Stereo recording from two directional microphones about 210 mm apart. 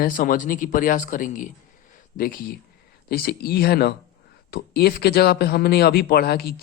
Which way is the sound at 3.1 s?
45° left (ahead or behind).